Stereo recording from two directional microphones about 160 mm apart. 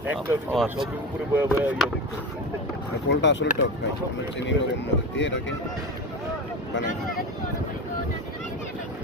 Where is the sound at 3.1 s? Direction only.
90° left.